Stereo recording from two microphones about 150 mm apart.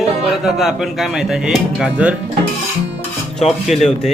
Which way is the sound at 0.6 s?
Centre (ahead or behind).